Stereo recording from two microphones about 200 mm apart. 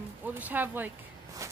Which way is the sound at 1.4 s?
15° right (ahead or behind).